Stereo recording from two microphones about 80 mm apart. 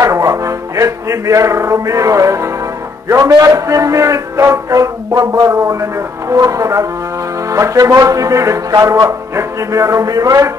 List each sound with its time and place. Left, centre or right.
0.0 s music: right
3.3 s a man's voice: right
8.8 s a man's voice: right
9.3 s music: right